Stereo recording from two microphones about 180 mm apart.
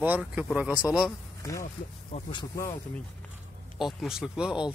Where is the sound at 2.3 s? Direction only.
25° left (ahead or behind).